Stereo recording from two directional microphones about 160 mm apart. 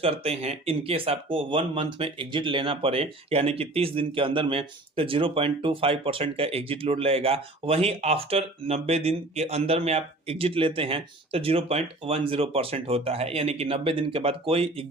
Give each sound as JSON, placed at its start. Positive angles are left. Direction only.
{"t": 0.0, "sound": "speech", "side_deg": -35}